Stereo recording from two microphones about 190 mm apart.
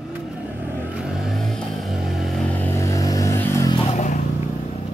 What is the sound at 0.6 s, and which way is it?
Vehicle, 10° right (ahead or behind).